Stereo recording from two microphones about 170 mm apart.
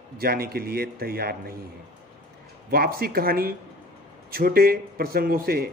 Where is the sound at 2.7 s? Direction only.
60° right (ahead or behind).